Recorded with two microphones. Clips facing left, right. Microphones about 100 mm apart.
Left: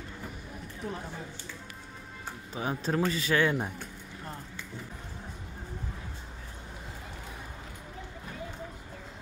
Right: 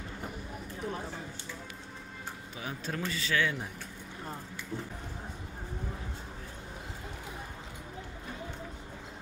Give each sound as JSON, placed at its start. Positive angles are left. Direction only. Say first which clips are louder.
{"t": 2.5, "sound": "speech", "louder": "left 8 dB", "side_deg": 35}